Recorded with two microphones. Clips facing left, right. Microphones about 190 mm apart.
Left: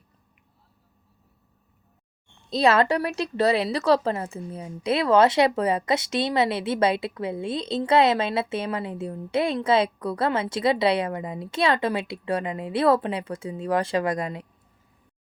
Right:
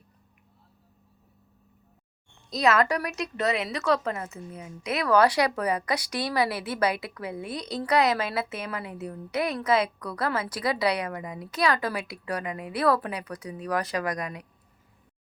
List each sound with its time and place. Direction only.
2.5 s a woman's voice: 30° left (ahead or behind)